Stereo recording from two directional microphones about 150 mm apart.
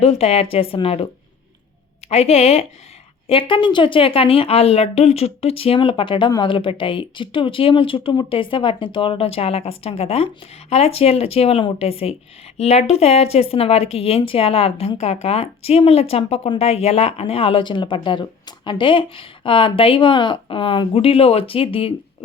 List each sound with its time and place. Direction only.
0.0 s a woman's voice: 40° left (ahead or behind)
2.0 s a woman's voice: 45° left (ahead or behind)